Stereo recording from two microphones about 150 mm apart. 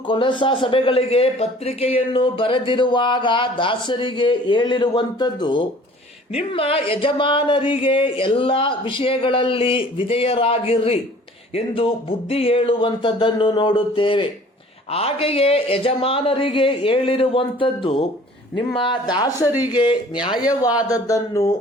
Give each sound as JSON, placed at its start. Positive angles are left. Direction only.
{"t": 0.1, "sound": "a man's voice", "side_deg": 35}
{"t": 19.5, "sound": "speech", "side_deg": -15}
{"t": 19.7, "sound": "a man's voice", "side_deg": 30}